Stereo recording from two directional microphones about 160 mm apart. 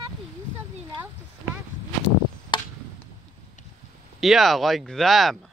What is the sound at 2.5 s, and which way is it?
Chop, 30° left (ahead or behind).